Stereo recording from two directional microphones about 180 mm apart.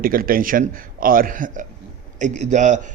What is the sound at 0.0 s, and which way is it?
A man's voice, 55° right (ahead or behind).